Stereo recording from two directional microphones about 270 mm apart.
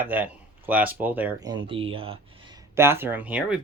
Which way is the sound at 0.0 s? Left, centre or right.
Centre.